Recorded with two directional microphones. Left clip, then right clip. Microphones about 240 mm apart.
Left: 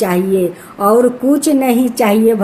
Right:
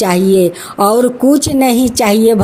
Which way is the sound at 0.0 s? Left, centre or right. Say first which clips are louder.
Right 4 dB; right.